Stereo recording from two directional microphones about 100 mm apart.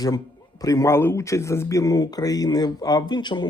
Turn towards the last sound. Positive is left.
turn(degrees=45)  # may be behind; listen again after turning